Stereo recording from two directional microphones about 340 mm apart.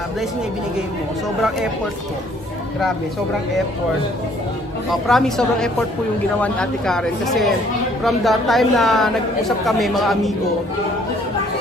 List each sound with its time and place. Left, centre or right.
5.0 s a woman's voice: centre